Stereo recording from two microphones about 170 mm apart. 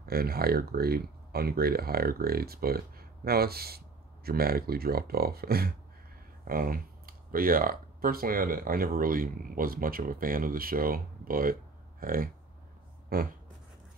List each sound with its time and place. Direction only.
0.1 s speech: 65° right (ahead or behind)